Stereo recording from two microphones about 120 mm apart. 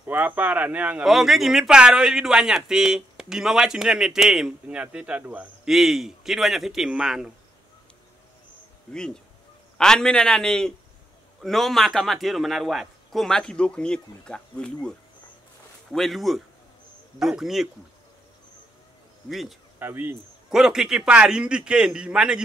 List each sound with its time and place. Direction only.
0.0 s a man's voice: 15° right (ahead or behind)
1.0 s a man's voice: centre (ahead or behind)
5.7 s speech: centre (ahead or behind)
8.9 s speech: 5° left (ahead or behind)
15.9 s speech: centre (ahead or behind)
19.2 s speech: centre (ahead or behind)
19.8 s speech: 20° right (ahead or behind)
20.5 s a man's voice: 5° right (ahead or behind)